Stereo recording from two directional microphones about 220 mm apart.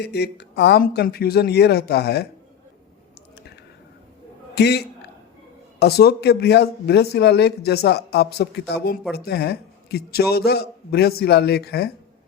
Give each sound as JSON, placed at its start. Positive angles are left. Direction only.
{"t": 0.0, "sound": "speech", "side_deg": 50}
{"t": 4.5, "sound": "speech", "side_deg": 50}